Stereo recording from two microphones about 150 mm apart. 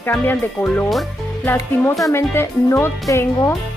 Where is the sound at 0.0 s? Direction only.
15° left (ahead or behind).